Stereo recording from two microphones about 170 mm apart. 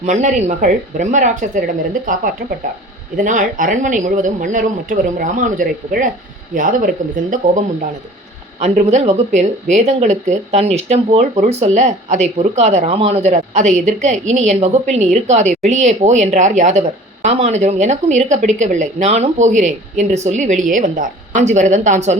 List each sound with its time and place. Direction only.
0.0 s speech: 45° right (ahead or behind)
8.6 s speech: 40° right (ahead or behind)